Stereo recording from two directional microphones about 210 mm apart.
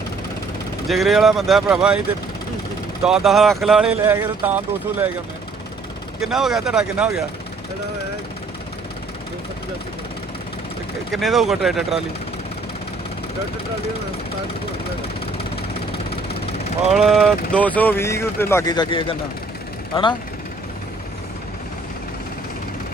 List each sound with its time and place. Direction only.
0.9 s speech: centre (ahead or behind)
3.0 s speech: centre (ahead or behind)
6.2 s speech: centre (ahead or behind)
11.1 s speech: centre (ahead or behind)
15.9 s vehicle: 25° left (ahead or behind)
16.9 s speech: centre (ahead or behind); by 20.1 s 25° left (ahead or behind)